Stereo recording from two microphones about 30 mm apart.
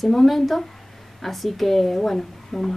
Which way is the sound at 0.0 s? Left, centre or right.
Centre.